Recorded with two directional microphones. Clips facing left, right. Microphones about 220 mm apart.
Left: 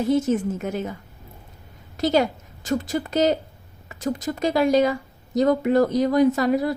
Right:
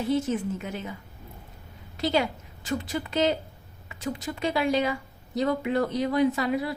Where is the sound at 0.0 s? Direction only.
45° left (ahead or behind).